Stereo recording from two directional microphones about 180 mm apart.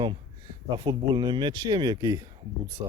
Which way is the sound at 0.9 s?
25° right (ahead or behind).